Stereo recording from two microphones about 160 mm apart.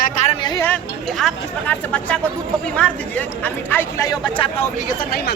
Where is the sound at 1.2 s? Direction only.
10° left (ahead or behind).